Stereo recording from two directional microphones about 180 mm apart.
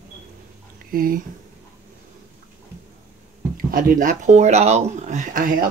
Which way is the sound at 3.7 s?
50° right (ahead or behind).